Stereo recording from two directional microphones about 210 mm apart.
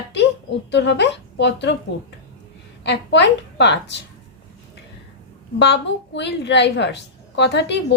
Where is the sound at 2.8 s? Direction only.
55° left (ahead or behind).